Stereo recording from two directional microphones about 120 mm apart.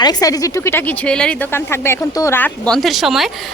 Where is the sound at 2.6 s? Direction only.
5° left (ahead or behind).